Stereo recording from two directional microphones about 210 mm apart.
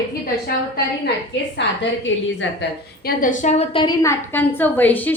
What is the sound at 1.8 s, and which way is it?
Speech, 65° left (ahead or behind).